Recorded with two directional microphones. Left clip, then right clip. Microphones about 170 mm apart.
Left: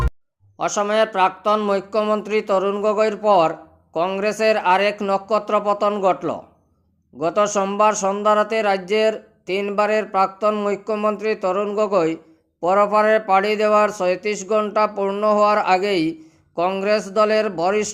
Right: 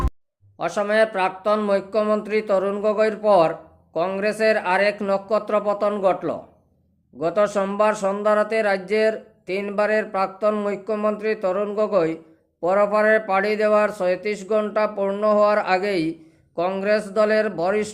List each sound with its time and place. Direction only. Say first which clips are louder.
0.6 s speech: left 1 dB; 30° left (ahead or behind)